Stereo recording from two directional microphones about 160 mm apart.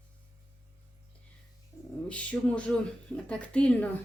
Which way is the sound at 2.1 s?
10° left (ahead or behind).